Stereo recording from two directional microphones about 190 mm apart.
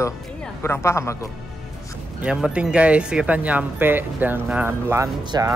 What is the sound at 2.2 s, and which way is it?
Speech, 5° right (ahead or behind).